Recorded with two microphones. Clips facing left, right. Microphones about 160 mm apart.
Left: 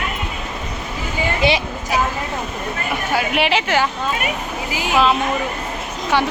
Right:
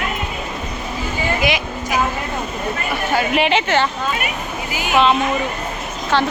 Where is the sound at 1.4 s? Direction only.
30° left (ahead or behind).